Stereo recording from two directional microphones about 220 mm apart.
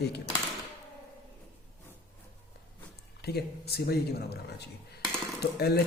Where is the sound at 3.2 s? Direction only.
45° left (ahead or behind).